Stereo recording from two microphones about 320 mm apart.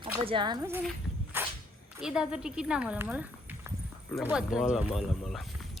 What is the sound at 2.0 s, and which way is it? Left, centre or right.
Speech, centre.